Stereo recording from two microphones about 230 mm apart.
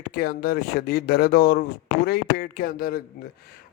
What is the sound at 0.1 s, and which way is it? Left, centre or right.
Speech, left.